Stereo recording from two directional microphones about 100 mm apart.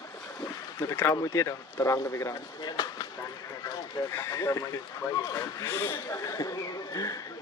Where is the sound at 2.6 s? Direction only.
45° left (ahead or behind).